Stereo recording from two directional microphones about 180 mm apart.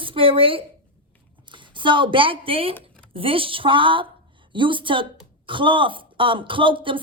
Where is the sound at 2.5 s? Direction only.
30° right (ahead or behind).